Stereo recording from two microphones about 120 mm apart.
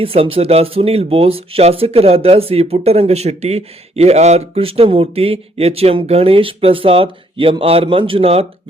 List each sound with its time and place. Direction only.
0.0 s speech: 50° right (ahead or behind)